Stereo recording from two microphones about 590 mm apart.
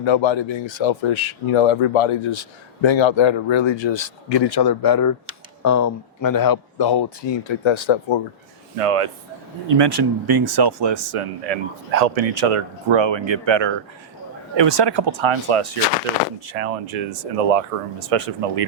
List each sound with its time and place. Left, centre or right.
0.0 s speech: left
8.8 s speech: right
9.6 s speech: right
16.5 s speech: right